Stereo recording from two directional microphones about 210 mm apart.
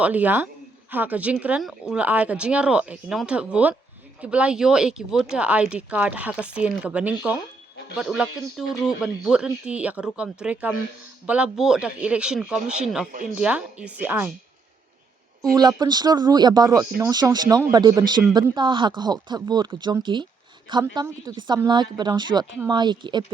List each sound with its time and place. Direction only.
0.0 s speech: 5° right (ahead or behind)
15.5 s speech: 20° right (ahead or behind)